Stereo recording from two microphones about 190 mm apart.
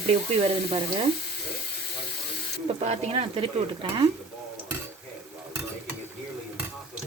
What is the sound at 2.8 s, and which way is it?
Stir, 35° right (ahead or behind).